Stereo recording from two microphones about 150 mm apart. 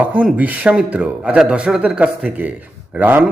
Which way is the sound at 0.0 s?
10° right (ahead or behind).